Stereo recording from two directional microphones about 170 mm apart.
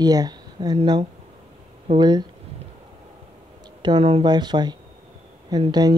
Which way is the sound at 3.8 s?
30° right (ahead or behind).